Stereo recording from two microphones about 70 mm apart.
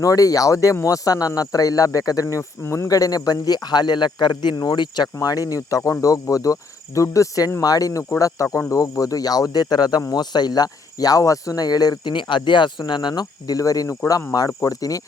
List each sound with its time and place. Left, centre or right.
0.0 s speech: left
2.2 s speech: left
5.2 s speech: left
12.7 s speech: left